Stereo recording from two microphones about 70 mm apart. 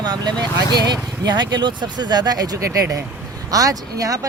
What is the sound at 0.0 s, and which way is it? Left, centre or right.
Speech, right.